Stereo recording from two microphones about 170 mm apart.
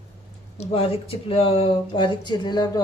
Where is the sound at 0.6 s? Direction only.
35° left (ahead or behind).